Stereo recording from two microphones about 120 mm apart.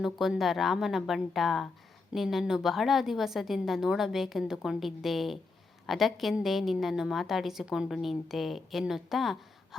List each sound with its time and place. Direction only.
0.0 s a woman's voice: centre (ahead or behind)